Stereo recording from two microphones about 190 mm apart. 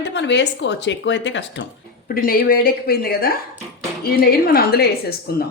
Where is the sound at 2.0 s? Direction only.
50° left (ahead or behind).